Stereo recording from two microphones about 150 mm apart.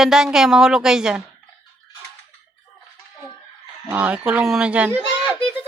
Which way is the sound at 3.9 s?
10° right (ahead or behind).